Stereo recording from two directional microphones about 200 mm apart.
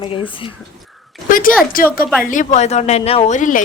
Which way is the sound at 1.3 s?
45° left (ahead or behind).